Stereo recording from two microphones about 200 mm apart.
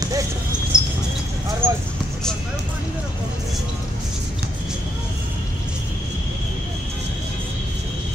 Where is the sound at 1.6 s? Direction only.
10° right (ahead or behind).